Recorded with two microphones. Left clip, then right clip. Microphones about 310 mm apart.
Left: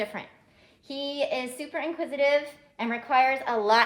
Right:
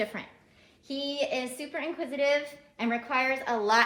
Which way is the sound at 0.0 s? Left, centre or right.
Left.